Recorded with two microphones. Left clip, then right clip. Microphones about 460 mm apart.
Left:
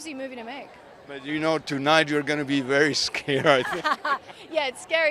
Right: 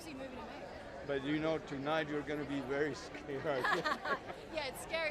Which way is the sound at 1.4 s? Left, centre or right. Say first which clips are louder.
Left 13 dB; centre.